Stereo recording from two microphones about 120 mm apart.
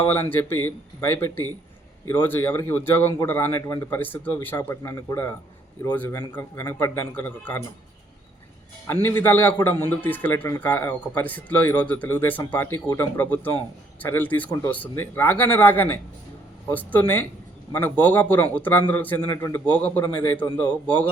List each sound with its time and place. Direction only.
0.1 s a man's voice: 20° left (ahead or behind)
6.6 s a man's voice: 25° left (ahead or behind)
8.9 s a man's voice: 20° left (ahead or behind)
19.3 s a man's voice: 25° left (ahead or behind)
19.7 s speech: 15° left (ahead or behind)